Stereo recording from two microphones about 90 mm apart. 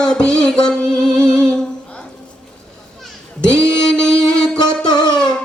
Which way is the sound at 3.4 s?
10° left (ahead or behind).